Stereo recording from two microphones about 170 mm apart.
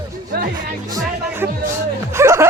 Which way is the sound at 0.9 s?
15° right (ahead or behind).